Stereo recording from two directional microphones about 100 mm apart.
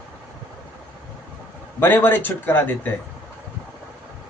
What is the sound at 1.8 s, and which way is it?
A man's voice, 20° left (ahead or behind).